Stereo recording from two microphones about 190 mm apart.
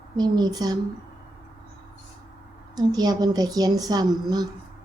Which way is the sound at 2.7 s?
20° right (ahead or behind).